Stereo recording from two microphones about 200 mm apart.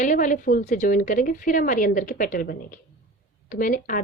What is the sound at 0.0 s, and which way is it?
A woman's voice, 40° left (ahead or behind).